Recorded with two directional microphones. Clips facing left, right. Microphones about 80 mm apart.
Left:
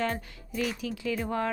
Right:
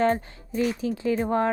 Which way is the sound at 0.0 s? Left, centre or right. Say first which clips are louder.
Right 8 dB; right.